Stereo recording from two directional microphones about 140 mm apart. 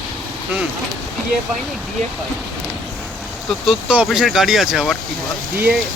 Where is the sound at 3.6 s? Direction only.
5° right (ahead or behind).